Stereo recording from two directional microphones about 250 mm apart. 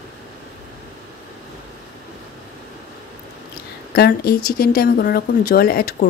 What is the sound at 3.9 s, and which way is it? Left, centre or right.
Speech, left.